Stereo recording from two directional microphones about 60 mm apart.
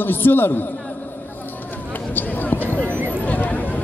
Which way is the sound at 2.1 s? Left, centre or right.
Left.